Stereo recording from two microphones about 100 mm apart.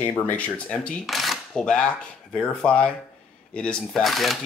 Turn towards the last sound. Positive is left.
turn(degrees=0)  # may be behind; listen again after turning